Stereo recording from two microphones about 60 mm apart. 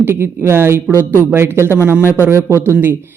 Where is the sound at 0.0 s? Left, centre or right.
Right.